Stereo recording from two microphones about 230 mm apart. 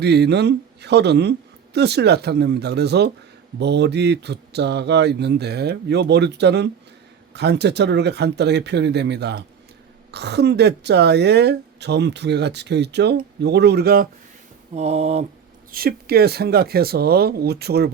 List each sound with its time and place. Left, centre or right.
0.0 s a woman's voice: right
14.8 s a sound: right
15.7 s a woman's voice: right